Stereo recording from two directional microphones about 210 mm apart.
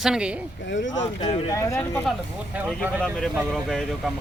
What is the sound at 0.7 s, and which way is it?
Speech, 60° left (ahead or behind).